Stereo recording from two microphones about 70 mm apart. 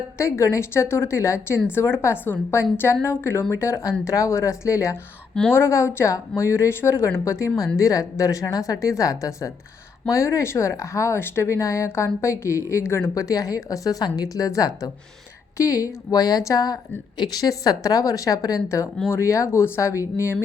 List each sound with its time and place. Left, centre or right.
0.2 s a woman's voice: left
13.1 s a woman's voice: left